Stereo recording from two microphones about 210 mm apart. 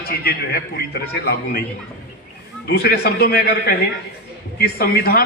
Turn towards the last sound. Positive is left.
turn(degrees=50)  # may be behind; listen again after turning